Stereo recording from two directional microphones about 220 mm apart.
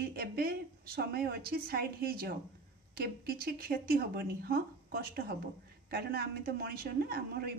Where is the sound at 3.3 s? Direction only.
45° right (ahead or behind).